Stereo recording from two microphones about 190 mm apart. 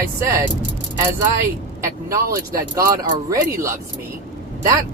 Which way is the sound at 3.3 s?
15° right (ahead or behind).